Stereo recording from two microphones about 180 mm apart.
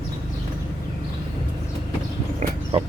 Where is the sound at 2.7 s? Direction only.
35° right (ahead or behind).